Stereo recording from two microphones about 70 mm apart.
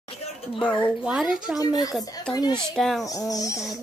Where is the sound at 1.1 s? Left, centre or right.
Centre.